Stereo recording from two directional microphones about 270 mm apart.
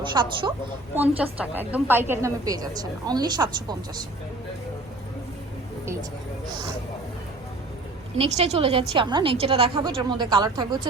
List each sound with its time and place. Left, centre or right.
0.0 s a woman's voice: centre
0.9 s a woman's voice: centre
8.2 s a woman's voice: right